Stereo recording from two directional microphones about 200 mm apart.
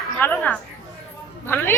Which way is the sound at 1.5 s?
10° left (ahead or behind).